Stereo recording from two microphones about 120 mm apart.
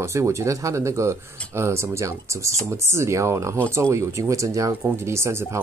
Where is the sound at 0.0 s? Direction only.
25° right (ahead or behind).